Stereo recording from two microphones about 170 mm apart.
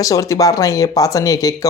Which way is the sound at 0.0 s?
20° left (ahead or behind).